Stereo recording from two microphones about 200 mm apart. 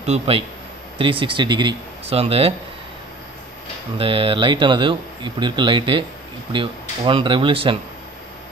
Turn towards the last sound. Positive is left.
turn(degrees=-25)  # may be behind; listen again after turning